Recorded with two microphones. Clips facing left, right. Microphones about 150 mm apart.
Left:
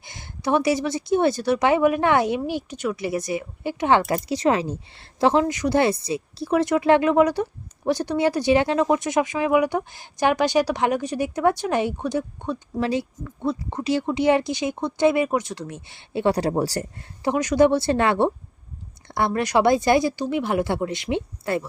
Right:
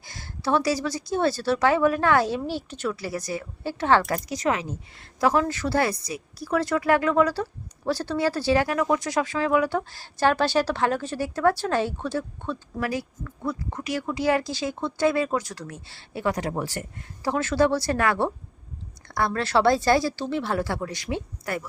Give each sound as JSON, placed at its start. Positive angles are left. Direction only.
{"t": 0.0, "sound": "speech", "side_deg": 20}
{"t": 17.2, "sound": "speech", "side_deg": 15}